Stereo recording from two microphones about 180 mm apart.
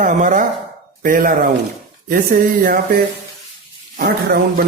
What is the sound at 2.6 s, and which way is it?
Speech, 55° right (ahead or behind).